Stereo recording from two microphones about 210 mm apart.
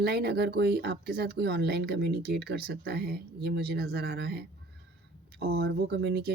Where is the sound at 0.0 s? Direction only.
50° right (ahead or behind).